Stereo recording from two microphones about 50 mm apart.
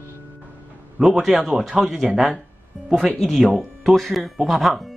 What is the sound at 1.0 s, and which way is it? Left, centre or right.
Speech, centre.